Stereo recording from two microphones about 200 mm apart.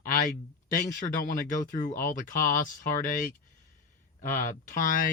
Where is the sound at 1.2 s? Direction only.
40° left (ahead or behind).